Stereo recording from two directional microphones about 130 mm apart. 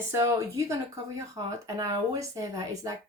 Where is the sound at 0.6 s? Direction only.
25° right (ahead or behind).